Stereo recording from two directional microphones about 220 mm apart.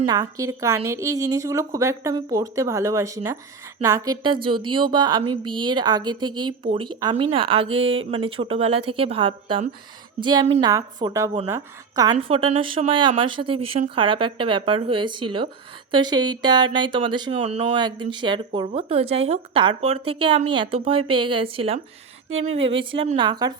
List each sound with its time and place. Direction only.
0.1 s a woman's voice: 15° right (ahead or behind)
12.1 s a woman's voice: 25° right (ahead or behind)
22.3 s speech: 65° right (ahead or behind)
22.6 s a woman's voice: 25° right (ahead or behind)